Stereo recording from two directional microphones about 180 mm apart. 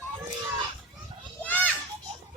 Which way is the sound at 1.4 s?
10° left (ahead or behind).